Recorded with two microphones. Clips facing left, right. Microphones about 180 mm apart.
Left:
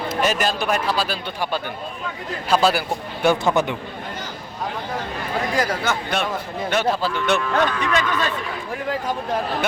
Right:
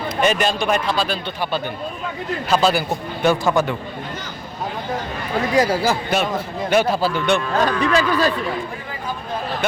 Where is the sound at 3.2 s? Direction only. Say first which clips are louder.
Right 1 dB; 15° left (ahead or behind).